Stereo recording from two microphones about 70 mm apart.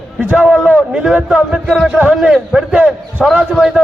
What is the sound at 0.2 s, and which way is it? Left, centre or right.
Speech, right.